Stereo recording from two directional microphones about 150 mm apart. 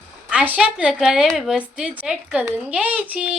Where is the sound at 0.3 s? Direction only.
10° right (ahead or behind).